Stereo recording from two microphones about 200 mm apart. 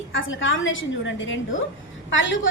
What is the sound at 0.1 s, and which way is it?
A woman's voice, 75° left (ahead or behind).